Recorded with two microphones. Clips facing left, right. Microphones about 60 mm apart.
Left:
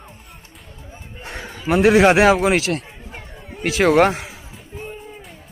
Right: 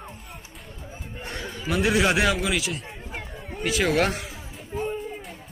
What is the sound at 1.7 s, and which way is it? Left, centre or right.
Speech, left.